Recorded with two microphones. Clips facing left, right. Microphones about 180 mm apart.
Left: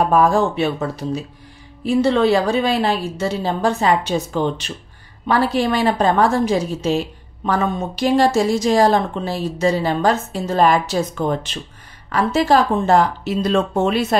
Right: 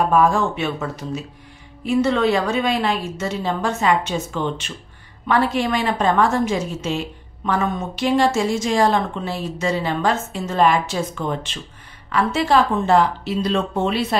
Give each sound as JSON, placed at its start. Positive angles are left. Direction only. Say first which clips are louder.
{"t": 0.1, "sound": "a woman's voice", "louder": "left 2 dB", "side_deg": 35}